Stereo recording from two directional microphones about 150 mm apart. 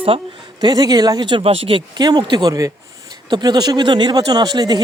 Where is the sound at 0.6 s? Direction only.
25° right (ahead or behind).